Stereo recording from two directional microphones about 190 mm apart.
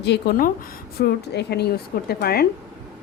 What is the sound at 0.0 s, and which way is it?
A woman's voice, 60° left (ahead or behind).